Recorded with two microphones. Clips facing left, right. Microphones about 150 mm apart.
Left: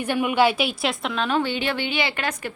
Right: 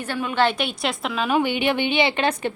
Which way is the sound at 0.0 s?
15° left (ahead or behind).